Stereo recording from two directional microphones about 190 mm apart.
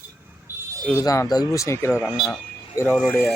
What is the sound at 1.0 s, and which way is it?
Speech, 20° left (ahead or behind).